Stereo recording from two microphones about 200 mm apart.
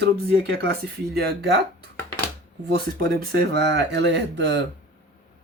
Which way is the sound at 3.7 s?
60° right (ahead or behind).